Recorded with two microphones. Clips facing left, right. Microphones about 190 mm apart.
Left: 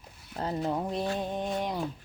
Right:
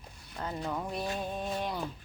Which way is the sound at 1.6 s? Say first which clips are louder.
Left 3 dB; 15° left (ahead or behind).